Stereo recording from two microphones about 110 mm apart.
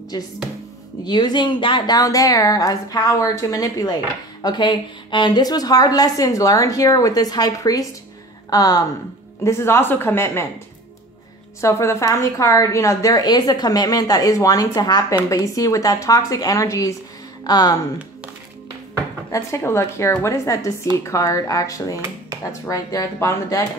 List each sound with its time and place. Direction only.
0.1 s a woman's voice: 35° left (ahead or behind)
11.6 s speech: 25° left (ahead or behind)
19.3 s a woman's voice: 25° left (ahead or behind)